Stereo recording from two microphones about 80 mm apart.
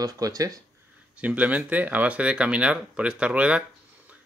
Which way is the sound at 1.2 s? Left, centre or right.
Centre.